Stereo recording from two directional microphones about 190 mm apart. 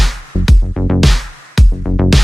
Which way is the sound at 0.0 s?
Centre (ahead or behind).